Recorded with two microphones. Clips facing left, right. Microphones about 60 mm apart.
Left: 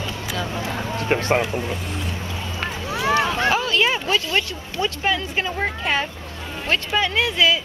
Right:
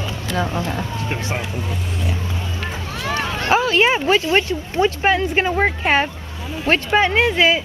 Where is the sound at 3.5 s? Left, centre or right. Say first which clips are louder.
Right 4 dB; right.